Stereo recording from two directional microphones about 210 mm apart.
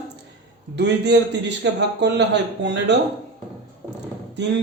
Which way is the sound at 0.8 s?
55° right (ahead or behind).